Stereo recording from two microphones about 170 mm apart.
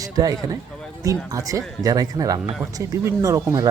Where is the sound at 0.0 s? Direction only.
20° right (ahead or behind).